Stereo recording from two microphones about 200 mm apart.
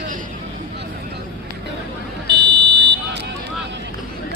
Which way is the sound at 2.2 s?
25° right (ahead or behind).